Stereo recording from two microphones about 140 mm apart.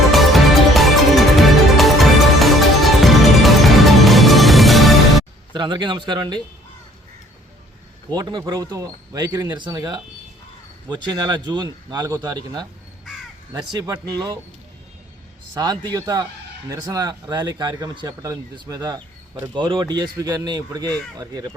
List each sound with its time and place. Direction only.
0.1 s music: centre (ahead or behind)
5.5 s a man's voice: 30° right (ahead or behind)
8.1 s a man's voice: 30° right (ahead or behind)
8.5 s a man's voice: 20° right (ahead or behind)
15.5 s speech: 30° right (ahead or behind)